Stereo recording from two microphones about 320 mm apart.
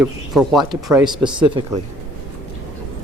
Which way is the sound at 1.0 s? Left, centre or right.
Centre.